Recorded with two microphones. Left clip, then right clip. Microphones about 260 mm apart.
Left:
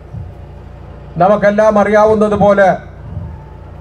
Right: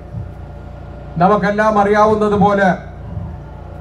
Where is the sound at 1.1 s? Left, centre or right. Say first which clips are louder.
Left 4 dB; left.